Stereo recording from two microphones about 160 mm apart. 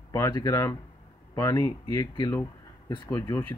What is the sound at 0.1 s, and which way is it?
Speech, 20° left (ahead or behind).